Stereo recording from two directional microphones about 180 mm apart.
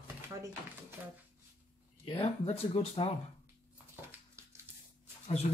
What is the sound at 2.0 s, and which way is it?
A man's voice, 30° left (ahead or behind).